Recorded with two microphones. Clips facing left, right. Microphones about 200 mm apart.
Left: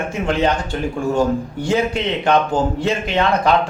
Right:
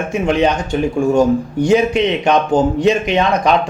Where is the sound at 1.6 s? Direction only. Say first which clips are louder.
Right 6 dB; 15° right (ahead or behind).